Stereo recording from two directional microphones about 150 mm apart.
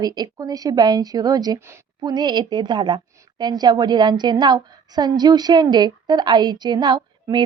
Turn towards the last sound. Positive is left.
turn(degrees=-30)  # may be behind; listen again after turning